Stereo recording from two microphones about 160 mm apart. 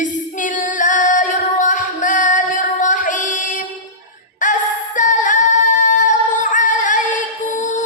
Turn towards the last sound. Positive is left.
turn(degrees=50)  # may be behind; listen again after turning